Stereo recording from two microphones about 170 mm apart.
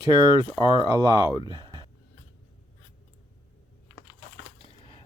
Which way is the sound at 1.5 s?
25° right (ahead or behind).